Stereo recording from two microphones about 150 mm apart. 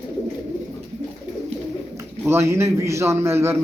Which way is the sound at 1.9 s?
20° right (ahead or behind).